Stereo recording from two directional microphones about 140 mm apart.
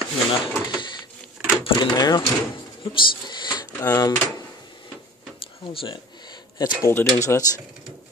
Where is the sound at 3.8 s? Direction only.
25° left (ahead or behind).